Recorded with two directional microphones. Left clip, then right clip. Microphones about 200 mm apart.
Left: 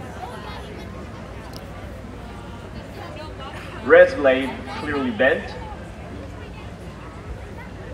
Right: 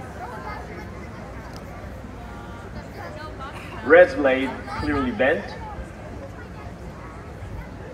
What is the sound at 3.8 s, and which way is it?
Speech, 35° right (ahead or behind).